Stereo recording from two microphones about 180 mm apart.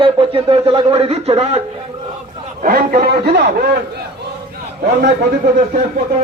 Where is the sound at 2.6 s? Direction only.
50° right (ahead or behind); by 3.8 s 65° right (ahead or behind).